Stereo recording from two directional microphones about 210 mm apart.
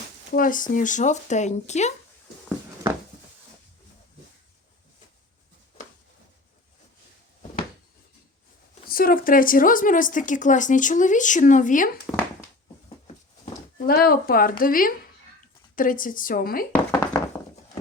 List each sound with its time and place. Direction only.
0.3 s speech: 40° left (ahead or behind)
8.9 s speech: 45° left (ahead or behind)
12.1 s speech: 5° left (ahead or behind)
13.1 s a sound: 40° left (ahead or behind)
14.6 s speech: 45° left (ahead or behind)
16.9 s a sound: 15° left (ahead or behind)